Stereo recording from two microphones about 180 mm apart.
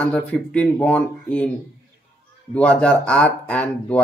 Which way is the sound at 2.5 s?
5° left (ahead or behind).